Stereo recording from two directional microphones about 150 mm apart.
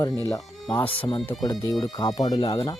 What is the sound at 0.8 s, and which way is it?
Speech, 35° left (ahead or behind).